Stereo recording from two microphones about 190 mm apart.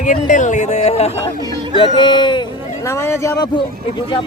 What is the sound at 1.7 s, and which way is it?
Speech, 25° left (ahead or behind).